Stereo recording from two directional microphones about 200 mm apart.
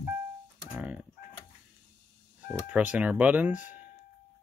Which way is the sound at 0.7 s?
5° right (ahead or behind).